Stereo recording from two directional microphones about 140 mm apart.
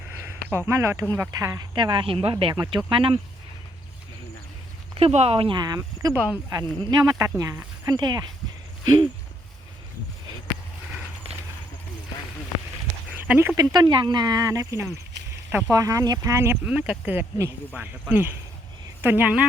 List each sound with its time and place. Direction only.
0.2 s a sound: 15° right (ahead or behind)
0.7 s speech: 20° right (ahead or behind); by 3.2 s 40° right (ahead or behind)
4.9 s speech: 45° right (ahead or behind); by 6.1 s 25° right (ahead or behind)
6.1 s speech: 10° right (ahead or behind)
6.5 s speech: 25° right (ahead or behind)
13.2 s speech: 10° right (ahead or behind)
13.6 s speech: 30° right (ahead or behind)
16.6 s speech: 5° right (ahead or behind)